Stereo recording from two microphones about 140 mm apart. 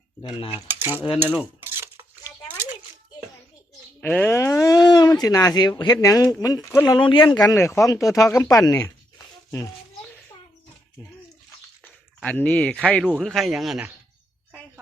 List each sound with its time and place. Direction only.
0.2 s speech: 35° left (ahead or behind)
0.7 s cutlery: 15° right (ahead or behind)
1.2 s dishes: 15° right (ahead or behind)
4.0 s speech: 15° left (ahead or behind)
11.8 s speech: 10° left (ahead or behind)